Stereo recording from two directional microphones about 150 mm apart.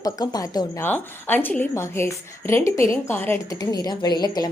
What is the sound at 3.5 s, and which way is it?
Speech, 25° left (ahead or behind).